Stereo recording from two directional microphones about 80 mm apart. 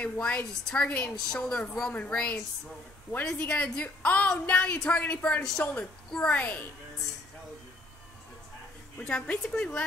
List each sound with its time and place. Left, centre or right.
0.0 s a woman's voice: centre
1.1 s a woman's voice: centre
9.0 s a woman's voice: centre